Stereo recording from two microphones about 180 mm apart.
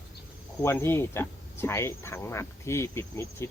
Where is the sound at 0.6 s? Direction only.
15° left (ahead or behind).